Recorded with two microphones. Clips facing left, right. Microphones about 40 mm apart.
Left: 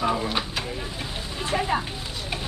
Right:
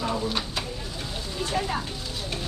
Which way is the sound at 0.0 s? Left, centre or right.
Left.